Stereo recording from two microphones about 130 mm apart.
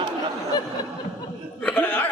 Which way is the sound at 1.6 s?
15° left (ahead or behind).